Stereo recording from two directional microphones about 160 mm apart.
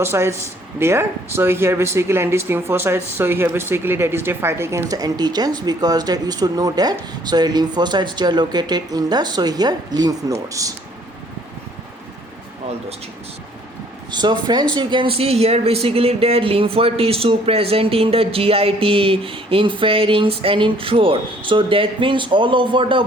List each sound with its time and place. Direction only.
0.0 s speech: 15° right (ahead or behind)
14.1 s speech: 25° right (ahead or behind)